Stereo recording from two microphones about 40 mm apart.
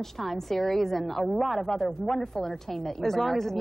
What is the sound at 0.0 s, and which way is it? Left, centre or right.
A woman's voice, centre.